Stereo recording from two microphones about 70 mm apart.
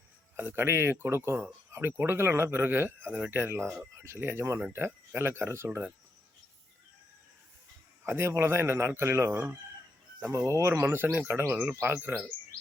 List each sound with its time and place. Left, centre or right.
0.3 s speech: right
8.0 s speech: right
10.3 s speech: right